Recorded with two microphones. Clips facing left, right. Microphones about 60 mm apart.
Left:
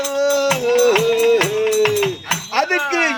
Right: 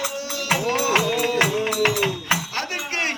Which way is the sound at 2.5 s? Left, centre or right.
Left.